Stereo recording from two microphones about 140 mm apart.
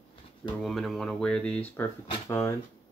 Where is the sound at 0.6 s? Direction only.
Centre (ahead or behind); by 2.5 s 20° left (ahead or behind).